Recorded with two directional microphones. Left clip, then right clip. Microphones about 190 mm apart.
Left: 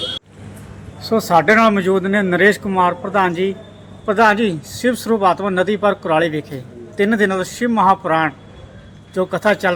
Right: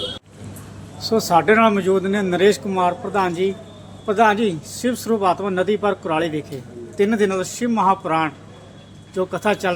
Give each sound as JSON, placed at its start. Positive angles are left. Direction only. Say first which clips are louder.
{"t": 1.0, "sound": "a man's voice", "louder": "left 2 dB", "side_deg": 40}